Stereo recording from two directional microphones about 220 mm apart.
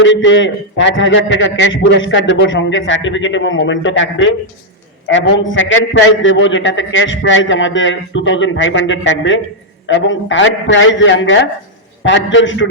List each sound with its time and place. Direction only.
0.0 s a man's voice: 55° left (ahead or behind)